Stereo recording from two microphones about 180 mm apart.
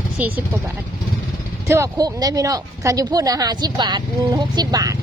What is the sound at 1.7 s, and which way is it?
Speech, 20° right (ahead or behind).